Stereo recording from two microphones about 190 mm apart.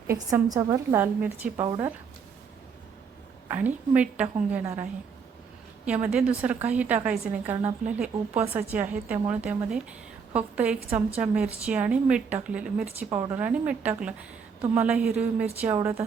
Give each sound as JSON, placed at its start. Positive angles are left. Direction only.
{"t": 0.1, "sound": "a woman's voice", "side_deg": -15}
{"t": 3.5, "sound": "a woman's voice", "side_deg": -10}